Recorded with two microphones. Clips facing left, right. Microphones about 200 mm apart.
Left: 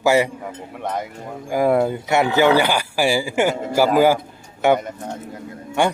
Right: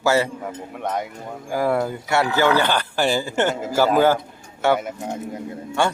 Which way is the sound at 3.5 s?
5° right (ahead or behind).